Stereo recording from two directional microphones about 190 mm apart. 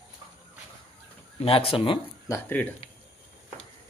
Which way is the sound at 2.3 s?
10° left (ahead or behind).